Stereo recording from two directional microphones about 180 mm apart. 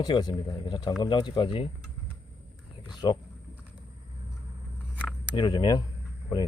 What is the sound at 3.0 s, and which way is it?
Speech, 25° left (ahead or behind).